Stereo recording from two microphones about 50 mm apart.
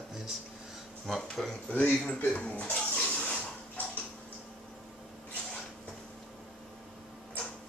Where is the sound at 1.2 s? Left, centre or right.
Centre.